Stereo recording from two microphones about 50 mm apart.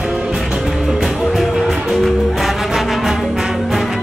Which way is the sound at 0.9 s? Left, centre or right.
Centre.